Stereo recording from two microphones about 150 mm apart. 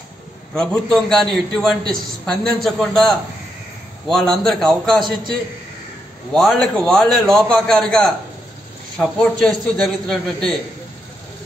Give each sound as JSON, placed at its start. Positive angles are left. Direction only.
{"t": 0.6, "sound": "a man's voice", "side_deg": 5}
{"t": 6.3, "sound": "a man's voice", "side_deg": 0}